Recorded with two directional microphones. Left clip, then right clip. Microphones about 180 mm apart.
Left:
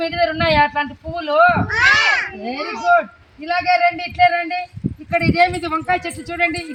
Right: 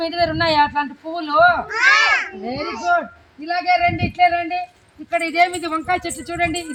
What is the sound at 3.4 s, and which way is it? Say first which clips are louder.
A man's voice: left 2 dB; 15° left (ahead or behind).